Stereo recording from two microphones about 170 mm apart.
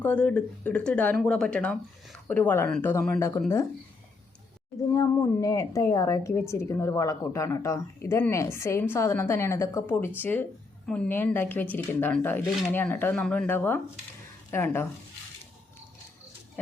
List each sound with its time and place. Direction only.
0.0 s speech: 10° left (ahead or behind)
4.8 s a woman's voice: 20° left (ahead or behind)